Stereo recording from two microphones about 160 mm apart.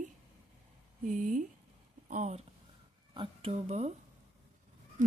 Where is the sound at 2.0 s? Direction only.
50° right (ahead or behind).